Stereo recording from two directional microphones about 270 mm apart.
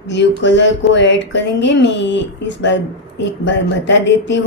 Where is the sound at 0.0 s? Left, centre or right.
Left.